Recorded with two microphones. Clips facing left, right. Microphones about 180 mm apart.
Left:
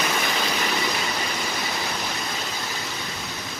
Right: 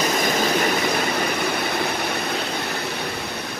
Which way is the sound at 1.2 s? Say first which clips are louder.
Right 6 dB; 60° right (ahead or behind).